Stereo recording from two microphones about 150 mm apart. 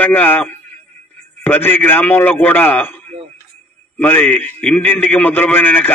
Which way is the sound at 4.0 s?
10° left (ahead or behind).